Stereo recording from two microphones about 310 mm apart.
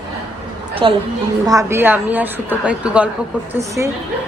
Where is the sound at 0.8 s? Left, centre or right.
Centre.